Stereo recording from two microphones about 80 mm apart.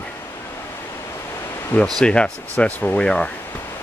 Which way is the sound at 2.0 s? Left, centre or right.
Centre.